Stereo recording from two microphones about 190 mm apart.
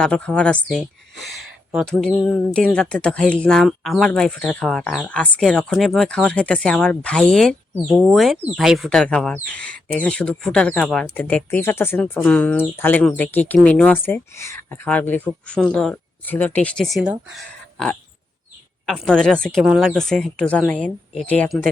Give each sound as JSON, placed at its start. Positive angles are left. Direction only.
{"t": 0.0, "sound": "speech", "side_deg": 5}